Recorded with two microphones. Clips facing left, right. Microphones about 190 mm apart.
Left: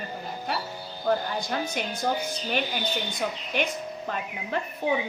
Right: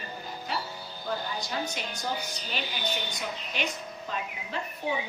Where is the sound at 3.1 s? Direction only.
55° left (ahead or behind).